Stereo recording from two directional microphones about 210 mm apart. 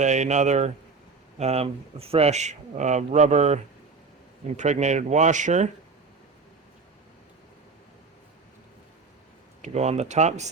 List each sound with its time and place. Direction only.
0.0 s speech: 35° right (ahead or behind)
9.6 s speech: 30° right (ahead or behind)